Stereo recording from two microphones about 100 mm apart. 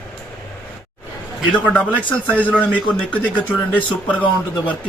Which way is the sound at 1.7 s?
10° left (ahead or behind).